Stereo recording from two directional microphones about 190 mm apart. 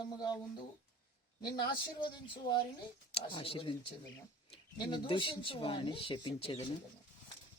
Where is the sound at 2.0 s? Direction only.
20° left (ahead or behind).